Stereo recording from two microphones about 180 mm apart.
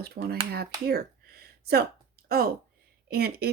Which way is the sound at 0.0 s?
60° right (ahead or behind).